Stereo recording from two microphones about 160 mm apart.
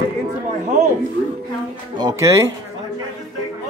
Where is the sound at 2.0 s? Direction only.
20° right (ahead or behind).